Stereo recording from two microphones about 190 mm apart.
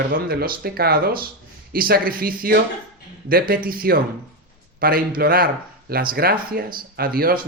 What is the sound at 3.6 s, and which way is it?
Speech, 50° right (ahead or behind).